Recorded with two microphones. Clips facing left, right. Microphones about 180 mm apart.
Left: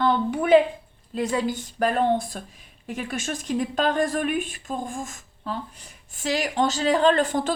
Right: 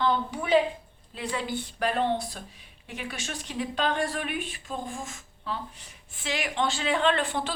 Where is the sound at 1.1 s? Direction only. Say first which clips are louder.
Left 7 dB; 40° left (ahead or behind).